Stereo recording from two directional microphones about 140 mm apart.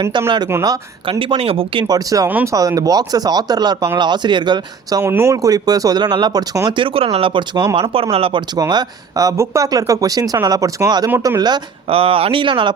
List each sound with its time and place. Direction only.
0.0 s speech: 20° right (ahead or behind)
8.1 s speech: 40° right (ahead or behind)
11.9 s speech: 40° right (ahead or behind)